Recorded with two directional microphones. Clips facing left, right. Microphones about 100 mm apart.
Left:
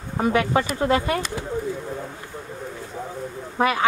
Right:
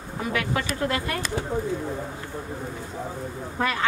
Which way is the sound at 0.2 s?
30° left (ahead or behind).